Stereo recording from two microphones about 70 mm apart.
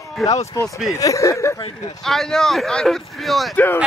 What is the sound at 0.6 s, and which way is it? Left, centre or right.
Speech, left.